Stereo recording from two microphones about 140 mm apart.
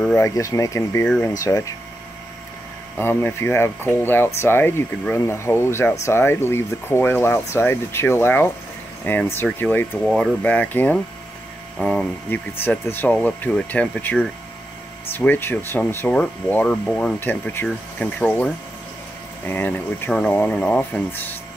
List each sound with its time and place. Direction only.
0.2 s speech: 25° left (ahead or behind)
1.0 s speech: 10° left (ahead or behind)
1.4 s speech: 25° left (ahead or behind)
3.0 s speech: 15° left (ahead or behind)
19.4 s speech: 15° left (ahead or behind)